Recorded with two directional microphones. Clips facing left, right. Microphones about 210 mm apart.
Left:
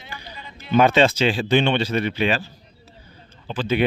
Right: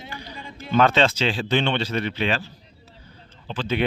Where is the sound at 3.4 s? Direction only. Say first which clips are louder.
Left 3 dB; 10° left (ahead or behind).